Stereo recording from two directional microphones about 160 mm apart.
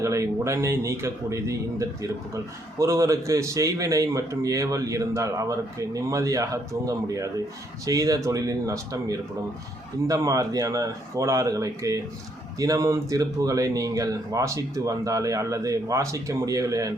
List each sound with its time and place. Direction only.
0.0 s speech: 20° right (ahead or behind)